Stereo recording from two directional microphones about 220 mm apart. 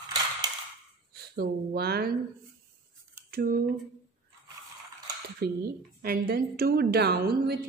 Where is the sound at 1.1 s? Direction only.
45° right (ahead or behind).